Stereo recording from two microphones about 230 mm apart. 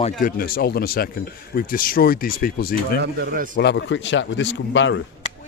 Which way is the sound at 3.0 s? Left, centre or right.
Right.